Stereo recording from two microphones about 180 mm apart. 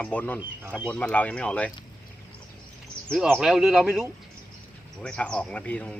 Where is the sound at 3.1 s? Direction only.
5° right (ahead or behind).